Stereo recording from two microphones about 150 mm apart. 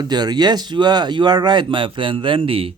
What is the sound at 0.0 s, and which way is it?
Speech, 25° right (ahead or behind).